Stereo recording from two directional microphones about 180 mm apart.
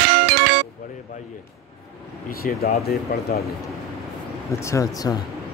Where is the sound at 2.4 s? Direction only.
55° left (ahead or behind).